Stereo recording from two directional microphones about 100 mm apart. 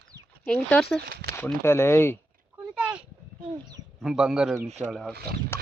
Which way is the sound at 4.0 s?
5° right (ahead or behind).